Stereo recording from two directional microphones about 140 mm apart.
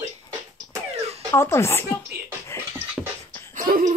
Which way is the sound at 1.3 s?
20° left (ahead or behind).